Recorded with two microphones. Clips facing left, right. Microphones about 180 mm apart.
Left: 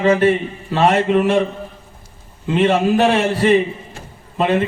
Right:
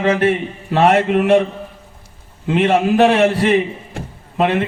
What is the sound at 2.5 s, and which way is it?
A man's voice, 55° right (ahead or behind).